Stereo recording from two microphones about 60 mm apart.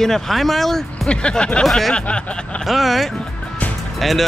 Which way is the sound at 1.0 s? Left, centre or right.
Centre.